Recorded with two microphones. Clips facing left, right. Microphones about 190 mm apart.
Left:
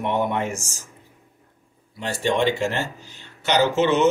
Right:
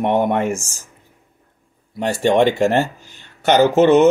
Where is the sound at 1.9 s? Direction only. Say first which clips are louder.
Right 7 dB; 50° right (ahead or behind).